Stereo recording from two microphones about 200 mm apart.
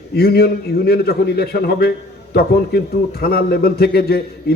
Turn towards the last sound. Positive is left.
turn(degrees=50)  # may be behind; listen again after turning